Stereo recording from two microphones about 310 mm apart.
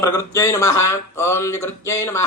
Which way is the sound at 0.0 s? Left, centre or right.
Centre.